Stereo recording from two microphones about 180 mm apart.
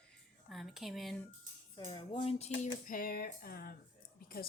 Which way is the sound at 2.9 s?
50° left (ahead or behind).